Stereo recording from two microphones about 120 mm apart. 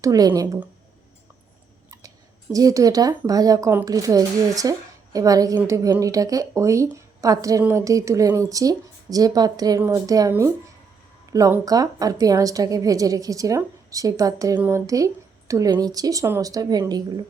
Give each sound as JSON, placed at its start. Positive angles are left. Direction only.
{"t": 0.0, "sound": "speech", "side_deg": -30}
{"t": 1.9, "sound": "a woman's voice", "side_deg": -30}